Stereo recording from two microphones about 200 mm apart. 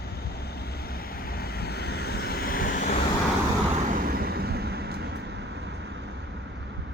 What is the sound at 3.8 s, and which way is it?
Vehicle, 45° right (ahead or behind).